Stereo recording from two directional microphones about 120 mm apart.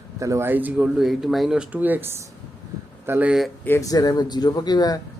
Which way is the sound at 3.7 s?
25° left (ahead or behind).